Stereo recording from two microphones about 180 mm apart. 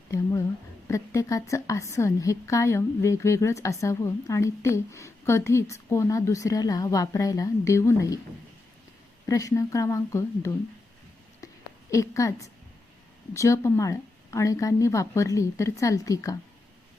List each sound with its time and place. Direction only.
0.1 s a sound: 15° left (ahead or behind)
0.9 s a woman's voice: 15° left (ahead or behind)
9.2 s a woman's voice: 15° left (ahead or behind)
11.9 s a woman's voice: 15° left (ahead or behind)